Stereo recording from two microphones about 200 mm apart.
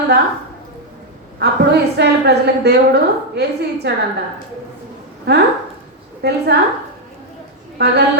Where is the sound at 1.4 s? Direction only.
55° right (ahead or behind).